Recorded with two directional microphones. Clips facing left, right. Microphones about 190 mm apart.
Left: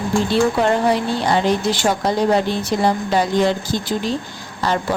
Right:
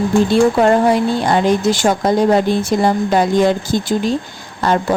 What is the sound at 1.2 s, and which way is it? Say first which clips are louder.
A woman's voice: right 3 dB; 50° right (ahead or behind).